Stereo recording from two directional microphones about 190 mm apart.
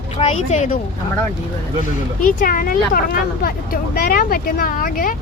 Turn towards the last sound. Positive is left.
turn(degrees=50)  # may be behind; listen again after turning